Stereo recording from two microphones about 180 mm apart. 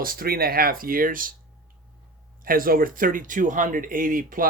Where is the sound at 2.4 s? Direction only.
50° right (ahead or behind).